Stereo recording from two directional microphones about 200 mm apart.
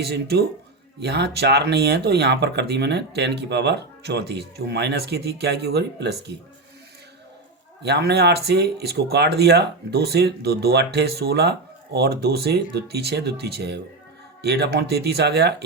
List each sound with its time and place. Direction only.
0.0 s speech: 55° right (ahead or behind)
7.8 s speech: 55° right (ahead or behind)